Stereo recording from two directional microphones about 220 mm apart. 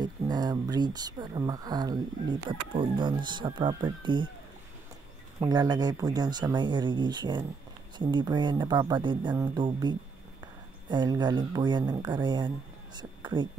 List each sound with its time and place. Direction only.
0.0 s speech: 20° right (ahead or behind)
5.4 s speech: 20° right (ahead or behind)
13.2 s a sound: 20° right (ahead or behind)